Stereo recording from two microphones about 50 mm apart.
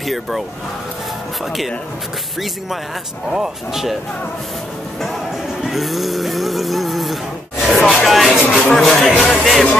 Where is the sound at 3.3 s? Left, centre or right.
Centre.